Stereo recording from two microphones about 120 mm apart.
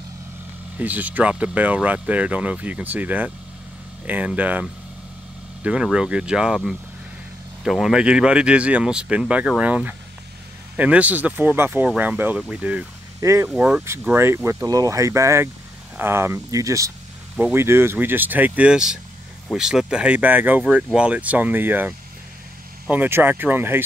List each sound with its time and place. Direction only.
0.7 s speech: 15° right (ahead or behind)
13.2 s speech: 25° right (ahead or behind)
13.5 s speech: 10° right (ahead or behind)